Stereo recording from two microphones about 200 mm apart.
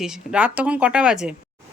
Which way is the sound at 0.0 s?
5° right (ahead or behind).